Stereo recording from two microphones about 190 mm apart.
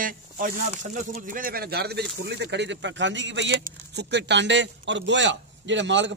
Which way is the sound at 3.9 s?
60° right (ahead or behind).